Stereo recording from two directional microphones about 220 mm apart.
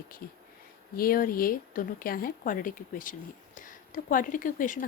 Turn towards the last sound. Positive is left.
turn(degrees=35)  # may be behind; listen again after turning